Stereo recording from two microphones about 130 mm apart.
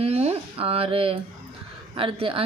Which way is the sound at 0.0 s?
50° right (ahead or behind).